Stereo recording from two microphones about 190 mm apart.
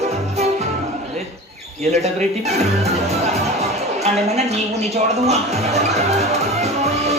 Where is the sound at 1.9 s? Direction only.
35° right (ahead or behind).